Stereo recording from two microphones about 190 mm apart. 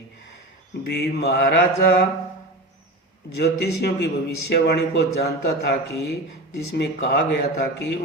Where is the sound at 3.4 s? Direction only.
60° left (ahead or behind).